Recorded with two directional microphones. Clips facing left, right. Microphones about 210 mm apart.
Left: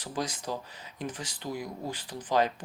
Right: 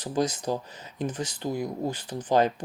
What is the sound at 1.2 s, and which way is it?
Speech, 20° right (ahead or behind).